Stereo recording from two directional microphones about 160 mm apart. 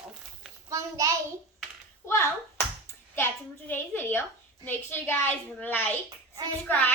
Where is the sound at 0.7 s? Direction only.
20° right (ahead or behind).